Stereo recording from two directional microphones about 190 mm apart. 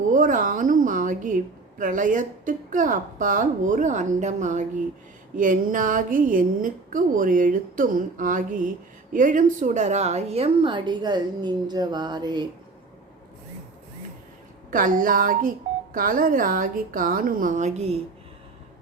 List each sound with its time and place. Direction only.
0.1 s a woman's voice: 45° right (ahead or behind); by 12.5 s 20° right (ahead or behind)
14.7 s speech: 45° right (ahead or behind)